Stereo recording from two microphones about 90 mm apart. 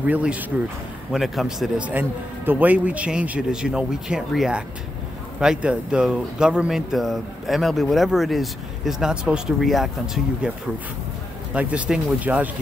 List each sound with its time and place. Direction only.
0.0 s speech: 15° right (ahead or behind)
1.1 s speech: centre (ahead or behind)
1.8 s speech: 20° right (ahead or behind)
5.4 s speech: 10° right (ahead or behind)
11.5 s speech: 15° right (ahead or behind)